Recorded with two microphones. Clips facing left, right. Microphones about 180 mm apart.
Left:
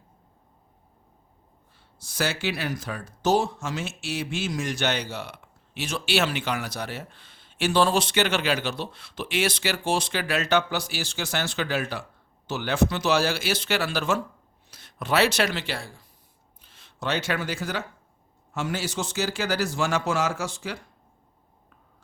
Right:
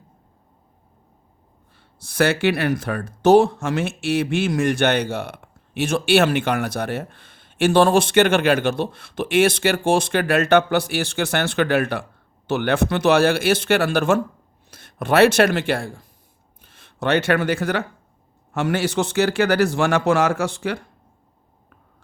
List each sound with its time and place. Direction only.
1.7 s speech: 60° right (ahead or behind)